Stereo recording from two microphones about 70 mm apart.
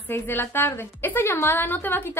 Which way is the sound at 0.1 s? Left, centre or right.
Left.